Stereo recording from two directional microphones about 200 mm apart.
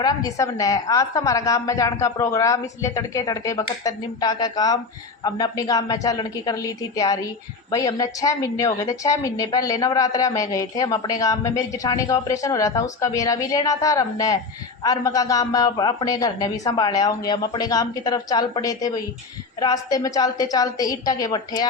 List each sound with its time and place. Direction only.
0.0 s a woman's voice: 20° left (ahead or behind)